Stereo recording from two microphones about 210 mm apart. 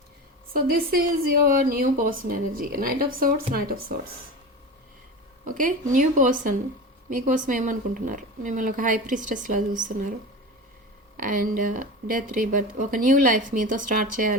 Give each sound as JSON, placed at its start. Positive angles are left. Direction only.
{"t": 0.5, "sound": "a woman's voice", "side_deg": -45}
{"t": 5.5, "sound": "speech", "side_deg": -40}
{"t": 11.2, "sound": "speech", "side_deg": -40}